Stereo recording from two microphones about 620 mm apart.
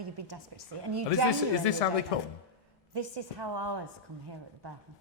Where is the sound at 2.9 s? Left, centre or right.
Right.